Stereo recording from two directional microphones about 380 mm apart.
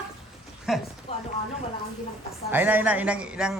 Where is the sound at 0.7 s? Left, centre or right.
Centre.